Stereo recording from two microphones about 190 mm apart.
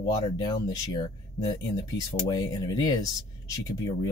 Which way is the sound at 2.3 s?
20° left (ahead or behind).